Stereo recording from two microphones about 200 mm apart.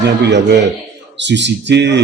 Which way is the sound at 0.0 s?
60° right (ahead or behind).